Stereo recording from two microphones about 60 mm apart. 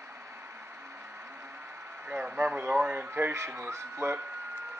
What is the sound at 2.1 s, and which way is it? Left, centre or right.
Speech, right.